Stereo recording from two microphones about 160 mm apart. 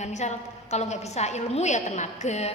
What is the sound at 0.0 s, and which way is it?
A woman's voice, 45° left (ahead or behind).